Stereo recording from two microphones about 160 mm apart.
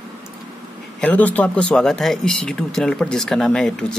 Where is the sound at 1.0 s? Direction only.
10° left (ahead or behind).